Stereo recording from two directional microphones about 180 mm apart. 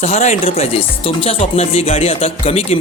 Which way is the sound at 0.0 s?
40° left (ahead or behind).